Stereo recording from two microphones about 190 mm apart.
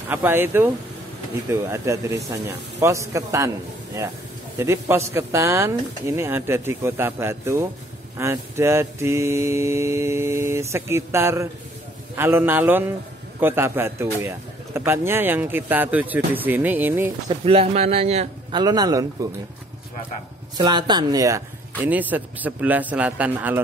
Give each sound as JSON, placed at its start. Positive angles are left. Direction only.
{"t": 0.1, "sound": "mantra", "side_deg": -10}
{"t": 17.3, "sound": "a man's voice", "side_deg": -30}
{"t": 18.5, "sound": "a man's voice", "side_deg": -20}
{"t": 20.5, "sound": "mantra", "side_deg": -20}